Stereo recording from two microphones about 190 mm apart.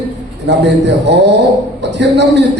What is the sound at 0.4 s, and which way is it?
A man's voice, 70° right (ahead or behind).